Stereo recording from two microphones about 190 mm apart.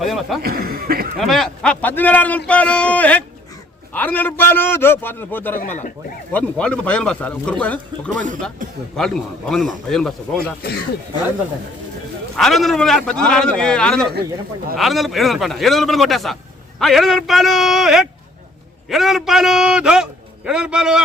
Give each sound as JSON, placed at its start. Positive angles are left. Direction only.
{"t": 0.0, "sound": "a man's voice", "side_deg": 0}
{"t": 0.4, "sound": "chuckle", "side_deg": -55}
{"t": 1.2, "sound": "speech", "side_deg": 0}
{"t": 5.5, "sound": "speech", "side_deg": 40}
{"t": 6.3, "sound": "a man's voice", "side_deg": 5}
{"t": 12.4, "sound": "a man's voice", "side_deg": 0}